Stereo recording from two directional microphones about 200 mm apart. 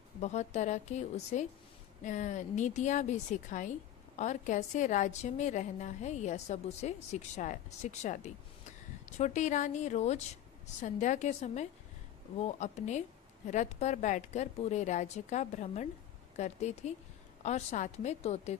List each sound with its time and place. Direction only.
0.2 s a woman's voice: 35° left (ahead or behind)